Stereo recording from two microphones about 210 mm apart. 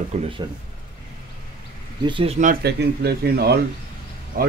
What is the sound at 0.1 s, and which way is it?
Speech, 35° right (ahead or behind).